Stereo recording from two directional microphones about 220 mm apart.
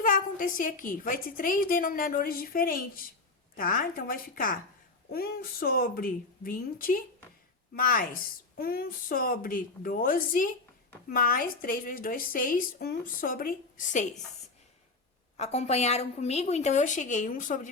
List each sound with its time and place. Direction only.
0.0 s a woman's voice: 40° left (ahead or behind)
15.4 s a woman's voice: 30° left (ahead or behind)